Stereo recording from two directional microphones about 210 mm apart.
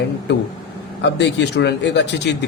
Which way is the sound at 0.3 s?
55° left (ahead or behind).